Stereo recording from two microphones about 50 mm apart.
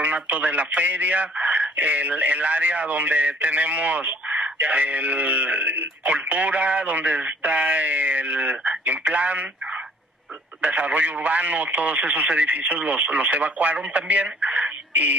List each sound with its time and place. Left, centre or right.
0.0 s a man's voice: right
10.6 s a man's voice: right